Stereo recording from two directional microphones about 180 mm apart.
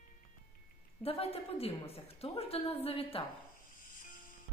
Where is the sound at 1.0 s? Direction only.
30° left (ahead or behind).